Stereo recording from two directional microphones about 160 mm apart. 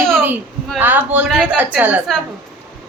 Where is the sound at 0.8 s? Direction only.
10° right (ahead or behind).